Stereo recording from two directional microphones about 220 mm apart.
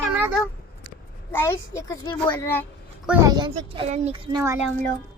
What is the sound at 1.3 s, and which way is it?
A woman's voice, 10° left (ahead or behind).